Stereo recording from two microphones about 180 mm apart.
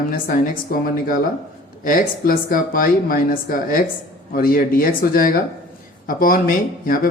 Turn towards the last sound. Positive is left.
turn(degrees=50)  # may be behind; listen again after turning